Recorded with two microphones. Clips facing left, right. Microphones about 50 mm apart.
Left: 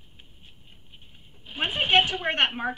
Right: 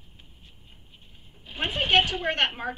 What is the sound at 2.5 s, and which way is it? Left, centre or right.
Speech, centre.